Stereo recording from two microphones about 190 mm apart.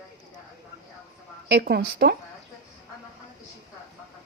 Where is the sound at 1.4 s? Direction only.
60° right (ahead or behind).